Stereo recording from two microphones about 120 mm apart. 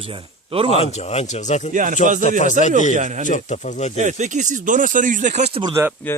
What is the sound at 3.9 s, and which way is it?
Speech, 85° right.